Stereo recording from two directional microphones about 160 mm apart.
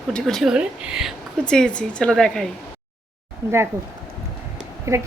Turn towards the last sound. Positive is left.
turn(degrees=-20)  # may be behind; listen again after turning